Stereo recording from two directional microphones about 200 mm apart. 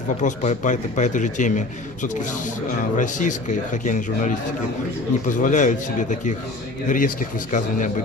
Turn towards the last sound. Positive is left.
turn(degrees=40)  # may be behind; listen again after turning